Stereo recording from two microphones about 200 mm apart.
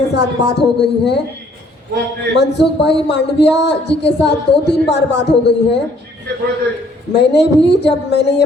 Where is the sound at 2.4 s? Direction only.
60° left (ahead or behind).